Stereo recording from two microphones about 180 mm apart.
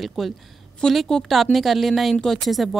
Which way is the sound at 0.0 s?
Centre (ahead or behind).